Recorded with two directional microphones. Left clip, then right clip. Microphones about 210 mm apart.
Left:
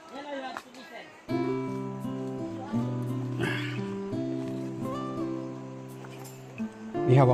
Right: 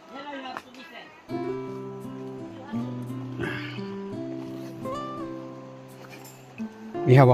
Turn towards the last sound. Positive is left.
turn(degrees=-30)  # may be behind; listen again after turning